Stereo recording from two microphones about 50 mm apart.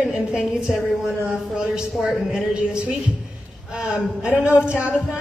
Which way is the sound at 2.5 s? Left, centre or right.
Right.